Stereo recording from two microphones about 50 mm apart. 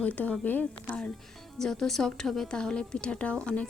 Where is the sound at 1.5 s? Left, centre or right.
Centre; by 3.7 s left.